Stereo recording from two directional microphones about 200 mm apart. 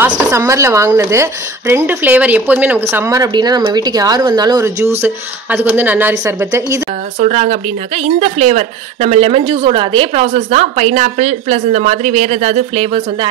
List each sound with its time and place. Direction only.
0.0 s a woman's voice: 15° right (ahead or behind)
7.2 s speech: 35° right (ahead or behind)